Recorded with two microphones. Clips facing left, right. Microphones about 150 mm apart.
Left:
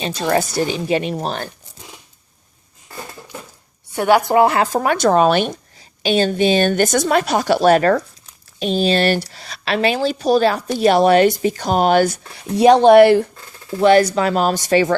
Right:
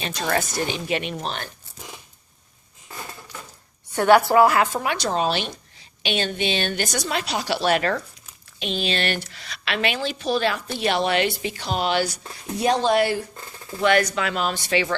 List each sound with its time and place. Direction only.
0.0 s speech: 30° left (ahead or behind)
3.9 s speech: 15° left (ahead or behind); by 5.5 s 50° left (ahead or behind)
6.0 s a woman's voice: 40° left (ahead or behind)
12.5 s speech: 70° left (ahead or behind)
13.8 s speech: 35° left (ahead or behind)